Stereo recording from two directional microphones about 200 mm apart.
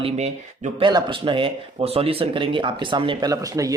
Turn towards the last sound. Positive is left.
turn(degrees=-15)  # may be behind; listen again after turning